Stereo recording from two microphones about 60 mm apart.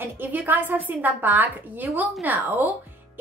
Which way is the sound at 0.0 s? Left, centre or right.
Right.